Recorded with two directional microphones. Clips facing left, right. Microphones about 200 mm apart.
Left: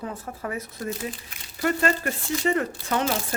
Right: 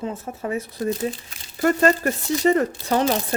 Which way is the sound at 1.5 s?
45° right (ahead or behind).